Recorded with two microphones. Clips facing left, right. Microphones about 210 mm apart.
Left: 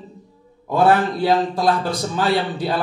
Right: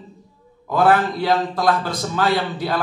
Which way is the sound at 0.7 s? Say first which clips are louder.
Left 1 dB; 30° left (ahead or behind).